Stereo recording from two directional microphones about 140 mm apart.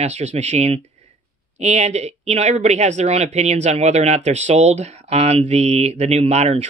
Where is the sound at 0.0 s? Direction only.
50° right (ahead or behind).